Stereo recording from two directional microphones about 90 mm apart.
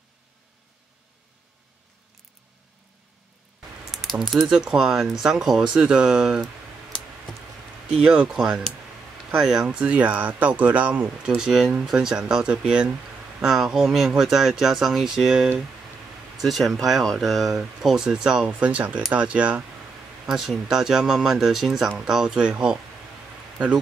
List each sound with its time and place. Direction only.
3.9 s speech: 5° left (ahead or behind)
7.9 s speech: 10° right (ahead or behind)